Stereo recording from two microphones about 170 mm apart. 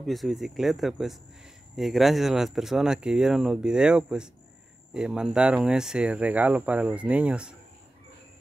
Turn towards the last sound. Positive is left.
turn(degrees=-5)  # may be behind; listen again after turning